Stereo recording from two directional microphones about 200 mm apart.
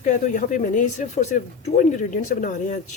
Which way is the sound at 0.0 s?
40° left (ahead or behind).